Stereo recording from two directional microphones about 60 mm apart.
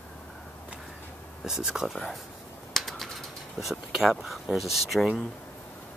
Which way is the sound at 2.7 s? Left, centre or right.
Centre.